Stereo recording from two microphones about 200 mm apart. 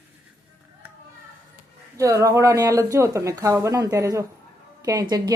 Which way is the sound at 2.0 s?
15° right (ahead or behind).